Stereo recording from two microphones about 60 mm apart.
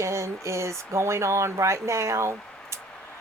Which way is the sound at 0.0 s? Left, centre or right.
Right.